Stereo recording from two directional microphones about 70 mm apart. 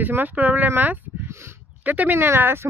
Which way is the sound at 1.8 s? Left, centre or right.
Right.